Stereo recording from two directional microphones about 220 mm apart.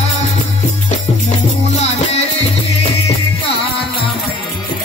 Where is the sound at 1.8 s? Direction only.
30° left (ahead or behind).